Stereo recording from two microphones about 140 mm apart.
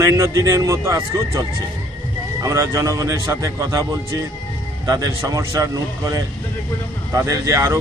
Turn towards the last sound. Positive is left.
turn(degrees=-20)  # may be behind; listen again after turning